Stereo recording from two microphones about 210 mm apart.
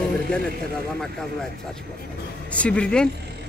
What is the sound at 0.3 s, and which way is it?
Speech, 5° left (ahead or behind).